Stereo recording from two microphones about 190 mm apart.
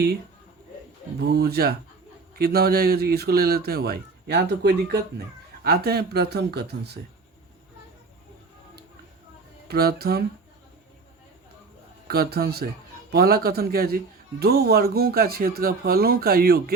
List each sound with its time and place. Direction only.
1.3 s a man's voice: 55° right (ahead or behind)
9.6 s speech: 55° right (ahead or behind)
12.0 s a man's voice: 55° right (ahead or behind)